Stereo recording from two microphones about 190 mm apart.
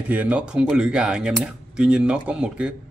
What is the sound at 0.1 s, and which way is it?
Speech, 5° right (ahead or behind).